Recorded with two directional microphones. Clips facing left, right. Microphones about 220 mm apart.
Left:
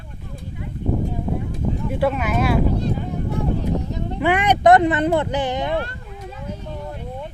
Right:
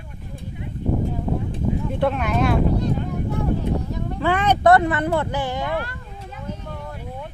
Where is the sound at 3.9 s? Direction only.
20° left (ahead or behind).